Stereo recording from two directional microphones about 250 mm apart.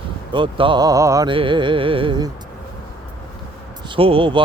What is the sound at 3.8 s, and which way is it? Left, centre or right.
Speech, right.